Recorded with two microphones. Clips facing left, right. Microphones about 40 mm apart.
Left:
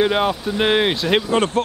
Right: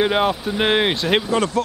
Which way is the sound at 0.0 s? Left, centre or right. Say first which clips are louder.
Even; centre.